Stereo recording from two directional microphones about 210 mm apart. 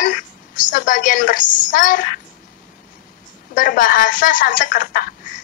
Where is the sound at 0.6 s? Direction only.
40° left (ahead or behind).